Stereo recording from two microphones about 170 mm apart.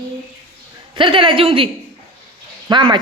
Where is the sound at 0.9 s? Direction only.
30° right (ahead or behind).